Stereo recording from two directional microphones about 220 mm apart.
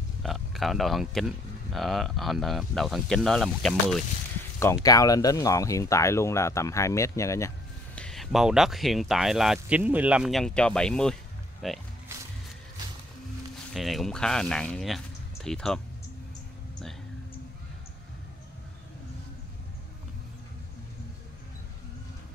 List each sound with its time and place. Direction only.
0.2 s speech: centre (ahead or behind)
4.8 s speech: 15° left (ahead or behind); by 11.8 s centre (ahead or behind)
13.7 s speech: centre (ahead or behind)